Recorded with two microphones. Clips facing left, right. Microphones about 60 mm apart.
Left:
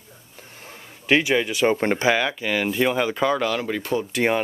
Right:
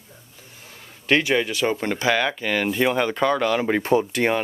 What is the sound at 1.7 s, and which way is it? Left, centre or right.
Speech, left.